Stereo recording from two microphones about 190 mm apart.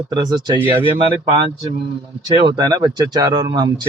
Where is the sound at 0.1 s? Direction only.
20° right (ahead or behind).